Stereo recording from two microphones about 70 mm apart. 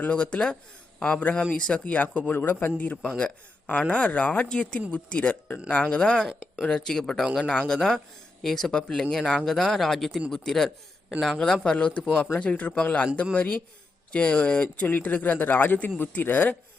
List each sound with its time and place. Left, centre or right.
0.0 s speech: centre
2.7 s speech: centre